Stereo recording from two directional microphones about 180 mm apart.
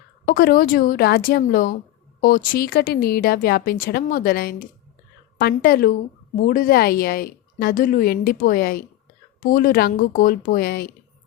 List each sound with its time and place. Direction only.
0.3 s a woman's voice: 55° left (ahead or behind)